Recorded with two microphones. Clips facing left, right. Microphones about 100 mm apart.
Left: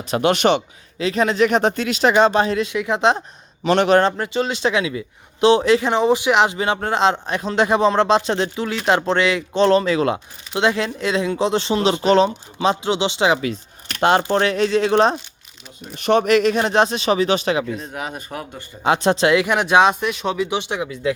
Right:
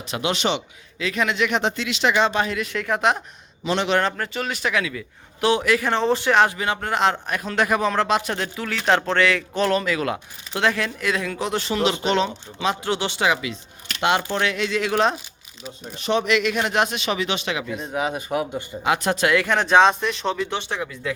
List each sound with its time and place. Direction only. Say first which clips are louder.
0.1 s a man's voice: left 7 dB; 50° left (ahead or behind)
0.9 s speech: left 5 dB; 35° left (ahead or behind)
2.6 s a man's voice: left 4 dB; 20° left (ahead or behind)
3.6 s a man's voice: left 7 dB; 55° left (ahead or behind)
4.2 s a man's voice: left 6 dB; 25° left (ahead or behind)
12.8 s a man's voice: left 4 dB; 20° left (ahead or behind)
14.0 s speech: left 5 dB; 40° left (ahead or behind)
16.0 s speech: left 6 dB; 55° left (ahead or behind); by 17.7 s 35° left (ahead or behind)
17.7 s speech: right 4 dB; 5° right (ahead or behind)
18.8 s speech: left 5 dB; 30° left (ahead or behind)